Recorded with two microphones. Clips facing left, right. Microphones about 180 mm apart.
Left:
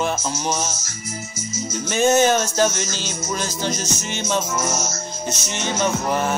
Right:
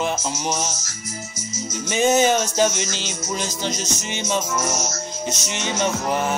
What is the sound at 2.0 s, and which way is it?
Music, 15° right (ahead or behind).